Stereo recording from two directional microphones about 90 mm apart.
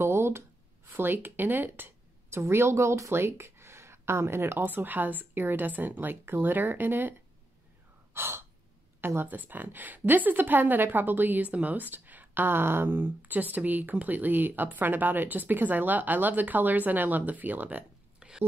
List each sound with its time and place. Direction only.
0.0 s a sound: 30° right (ahead or behind)
0.9 s a woman's voice: 20° right (ahead or behind)
8.1 s gasp: 25° right (ahead or behind)
9.0 s a woman's voice: 25° right (ahead or behind)